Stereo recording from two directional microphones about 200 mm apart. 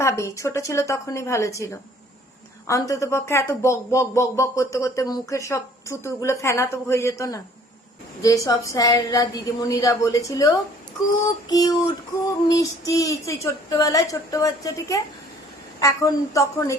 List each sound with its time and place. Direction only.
0.0 s speech: 15° left (ahead or behind)
11.4 s a sound: 20° left (ahead or behind)
12.5 s speech: 15° left (ahead or behind)